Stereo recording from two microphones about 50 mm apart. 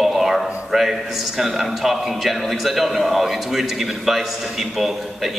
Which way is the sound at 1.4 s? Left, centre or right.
Centre.